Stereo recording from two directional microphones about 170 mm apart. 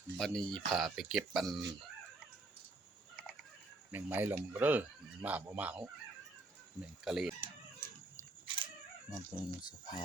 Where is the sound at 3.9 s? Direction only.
10° right (ahead or behind).